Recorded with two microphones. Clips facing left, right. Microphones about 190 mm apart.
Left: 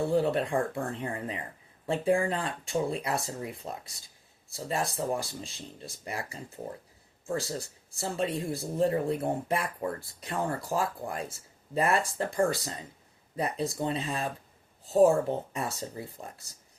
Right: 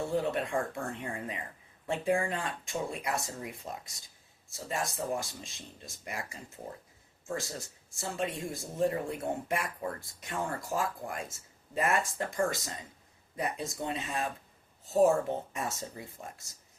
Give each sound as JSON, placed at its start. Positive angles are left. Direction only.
{"t": 0.0, "sound": "speech", "side_deg": 35}
{"t": 15.5, "sound": "speech", "side_deg": 35}